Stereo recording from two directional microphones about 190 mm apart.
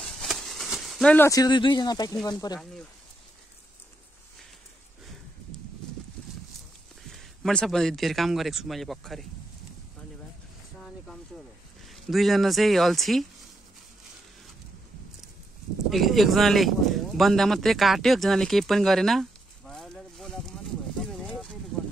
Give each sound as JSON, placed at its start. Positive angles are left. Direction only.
{"t": 0.0, "sound": "a sound", "side_deg": 0}
{"t": 1.1, "sound": "speech", "side_deg": 15}
{"t": 7.1, "sound": "speech", "side_deg": 0}
{"t": 11.8, "sound": "speech", "side_deg": 0}
{"t": 15.9, "sound": "speech", "side_deg": 0}
{"t": 21.0, "sound": "a sound", "side_deg": 5}